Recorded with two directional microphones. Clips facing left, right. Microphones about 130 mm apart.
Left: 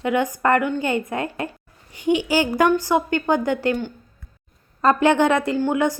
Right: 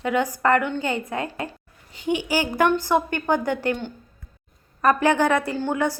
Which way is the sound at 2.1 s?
15° right (ahead or behind).